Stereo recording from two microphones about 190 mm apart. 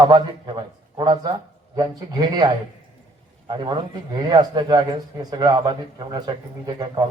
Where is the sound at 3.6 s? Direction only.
25° right (ahead or behind).